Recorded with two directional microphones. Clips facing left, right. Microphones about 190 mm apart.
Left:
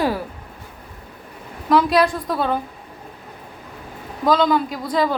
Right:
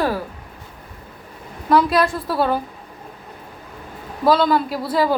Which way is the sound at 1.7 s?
Centre (ahead or behind).